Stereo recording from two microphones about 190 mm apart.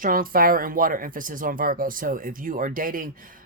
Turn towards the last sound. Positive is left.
turn(degrees=-45)  # may be behind; listen again after turning